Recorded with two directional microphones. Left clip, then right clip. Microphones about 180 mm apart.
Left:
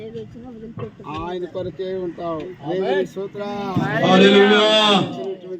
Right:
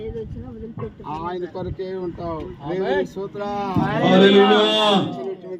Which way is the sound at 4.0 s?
65° right (ahead or behind).